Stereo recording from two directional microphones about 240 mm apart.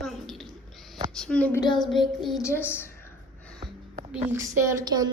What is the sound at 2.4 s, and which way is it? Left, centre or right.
Speech, centre.